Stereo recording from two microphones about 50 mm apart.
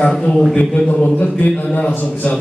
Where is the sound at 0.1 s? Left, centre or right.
Centre.